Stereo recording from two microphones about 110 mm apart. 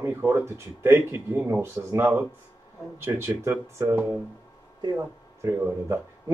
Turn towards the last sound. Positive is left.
turn(degrees=-25)  # may be behind; listen again after turning